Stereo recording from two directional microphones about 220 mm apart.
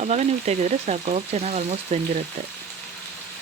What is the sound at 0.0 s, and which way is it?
Frying, 30° right (ahead or behind).